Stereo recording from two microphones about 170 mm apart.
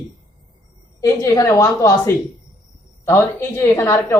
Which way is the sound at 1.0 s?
20° left (ahead or behind).